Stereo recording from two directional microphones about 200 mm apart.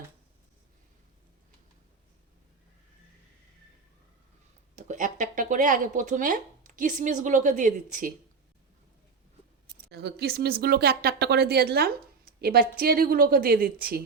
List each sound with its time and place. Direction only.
4.7 s speech: 35° right (ahead or behind)
9.9 s speech: 55° right (ahead or behind)